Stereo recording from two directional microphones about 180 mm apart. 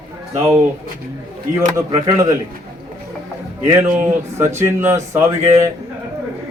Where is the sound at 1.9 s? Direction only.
20° right (ahead or behind).